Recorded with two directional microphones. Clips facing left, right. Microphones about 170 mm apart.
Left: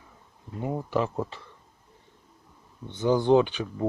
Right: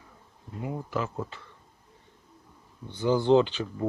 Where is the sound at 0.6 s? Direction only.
35° left (ahead or behind).